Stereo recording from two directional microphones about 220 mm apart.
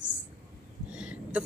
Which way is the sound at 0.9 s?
5° right (ahead or behind).